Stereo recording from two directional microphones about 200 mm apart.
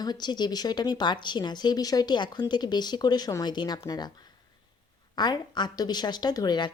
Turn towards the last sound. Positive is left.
turn(degrees=20)  # may be behind; listen again after turning